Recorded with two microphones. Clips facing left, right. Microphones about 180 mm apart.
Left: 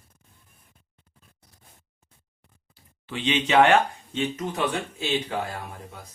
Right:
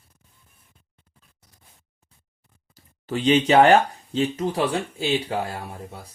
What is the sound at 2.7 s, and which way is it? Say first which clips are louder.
Speech: right 7 dB; 40° right (ahead or behind).